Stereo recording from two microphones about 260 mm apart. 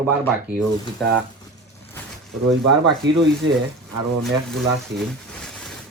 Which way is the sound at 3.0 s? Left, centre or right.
Right.